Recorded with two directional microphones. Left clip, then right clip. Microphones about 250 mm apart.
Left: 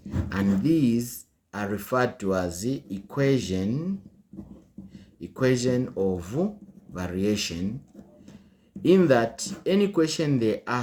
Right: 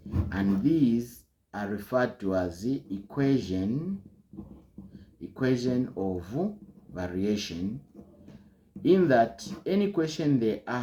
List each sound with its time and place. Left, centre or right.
0.3 s speech: left
5.3 s speech: left
8.8 s speech: left